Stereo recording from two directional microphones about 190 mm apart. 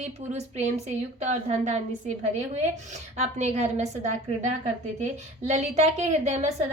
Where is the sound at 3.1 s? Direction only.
35° right (ahead or behind).